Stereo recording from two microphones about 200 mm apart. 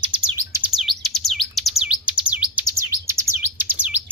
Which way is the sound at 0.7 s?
Centre (ahead or behind).